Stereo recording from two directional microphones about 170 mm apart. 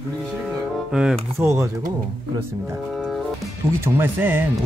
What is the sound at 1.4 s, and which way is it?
Speech, 15° right (ahead or behind).